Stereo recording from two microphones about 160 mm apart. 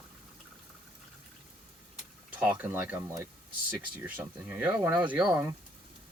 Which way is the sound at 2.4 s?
10° right (ahead or behind).